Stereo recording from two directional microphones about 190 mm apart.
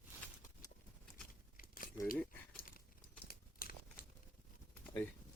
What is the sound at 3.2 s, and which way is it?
Crumpling, 50° left (ahead or behind).